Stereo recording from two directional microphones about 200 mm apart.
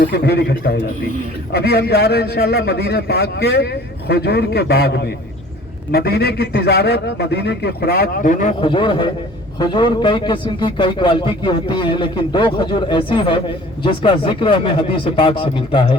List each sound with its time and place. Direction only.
0.0 s a man's voice: 55° left (ahead or behind); by 8.5 s 40° left (ahead or behind)
8.6 s a man's voice: 25° left (ahead or behind)